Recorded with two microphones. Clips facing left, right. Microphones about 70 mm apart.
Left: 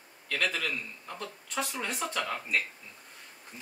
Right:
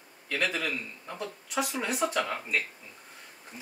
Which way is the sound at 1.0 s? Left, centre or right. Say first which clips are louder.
Right 3 dB; centre.